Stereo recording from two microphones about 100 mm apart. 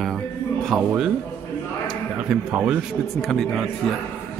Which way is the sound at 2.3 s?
5° right (ahead or behind).